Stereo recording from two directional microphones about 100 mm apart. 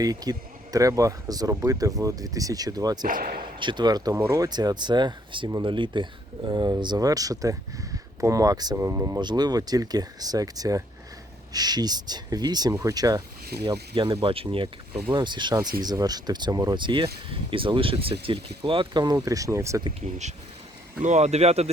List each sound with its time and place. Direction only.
0.0 s speech: 40° right (ahead or behind)
3.6 s speech: 50° right (ahead or behind)
4.1 s speech: 25° right (ahead or behind)
4.4 s speech: 45° right (ahead or behind)
8.7 s speech: 30° right (ahead or behind)
9.2 s speech: 45° right (ahead or behind)
13.9 s speech: 65° right (ahead or behind); by 16.7 s 40° right (ahead or behind)
16.7 s speech: 55° right (ahead or behind); by 19.8 s 30° right (ahead or behind)
21.2 s speech: 90° right